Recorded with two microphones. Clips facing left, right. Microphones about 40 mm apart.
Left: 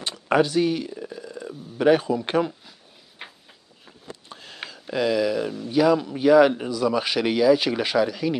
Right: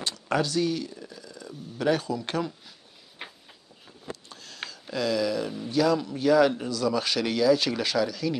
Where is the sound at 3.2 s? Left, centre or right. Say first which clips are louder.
Left 1 dB; centre.